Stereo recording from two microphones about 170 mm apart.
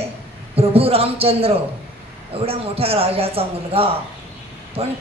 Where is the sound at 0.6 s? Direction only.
35° right (ahead or behind).